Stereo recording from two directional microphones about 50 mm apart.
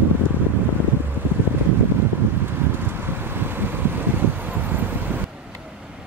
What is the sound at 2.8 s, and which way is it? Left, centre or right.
Vehicle, right.